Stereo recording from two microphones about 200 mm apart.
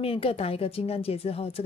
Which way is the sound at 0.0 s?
30° left (ahead or behind).